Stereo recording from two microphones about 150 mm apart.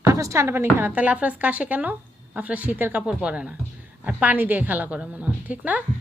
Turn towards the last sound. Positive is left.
turn(degrees=-10)  # may be behind; listen again after turning